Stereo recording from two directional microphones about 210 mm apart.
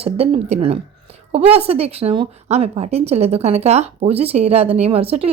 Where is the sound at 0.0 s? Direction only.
30° right (ahead or behind).